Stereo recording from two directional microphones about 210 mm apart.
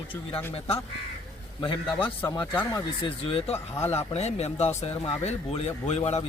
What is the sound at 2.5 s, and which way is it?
Speech, 10° left (ahead or behind).